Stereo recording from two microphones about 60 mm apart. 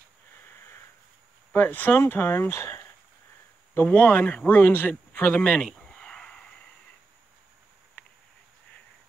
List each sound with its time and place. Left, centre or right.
1.5 s speech: left
3.7 s speech: left
5.4 s speech: centre
5.8 s a sound: centre